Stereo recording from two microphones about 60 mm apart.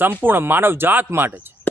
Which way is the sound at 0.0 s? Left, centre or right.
Right.